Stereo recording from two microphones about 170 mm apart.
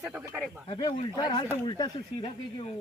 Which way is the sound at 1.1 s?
25° left (ahead or behind).